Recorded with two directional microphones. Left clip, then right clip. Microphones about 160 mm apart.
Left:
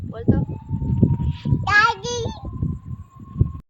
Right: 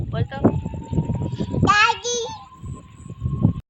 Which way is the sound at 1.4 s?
25° left (ahead or behind).